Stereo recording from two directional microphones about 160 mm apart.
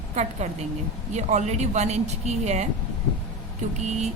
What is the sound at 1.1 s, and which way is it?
A woman's voice, 45° right (ahead or behind).